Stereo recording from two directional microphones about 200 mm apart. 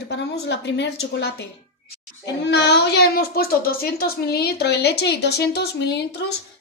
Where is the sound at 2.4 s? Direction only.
55° left (ahead or behind).